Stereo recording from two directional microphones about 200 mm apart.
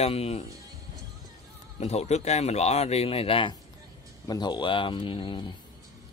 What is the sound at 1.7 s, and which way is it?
Speech, 30° left (ahead or behind).